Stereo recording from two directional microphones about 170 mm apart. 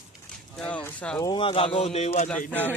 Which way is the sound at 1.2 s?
30° left (ahead or behind).